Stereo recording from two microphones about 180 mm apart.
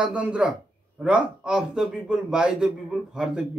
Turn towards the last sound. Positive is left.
turn(degrees=-5)  # may be behind; listen again after turning